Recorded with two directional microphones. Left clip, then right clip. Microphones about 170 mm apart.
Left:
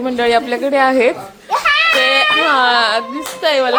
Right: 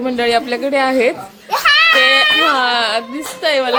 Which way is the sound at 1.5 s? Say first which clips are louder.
Right 2 dB; 65° right (ahead or behind).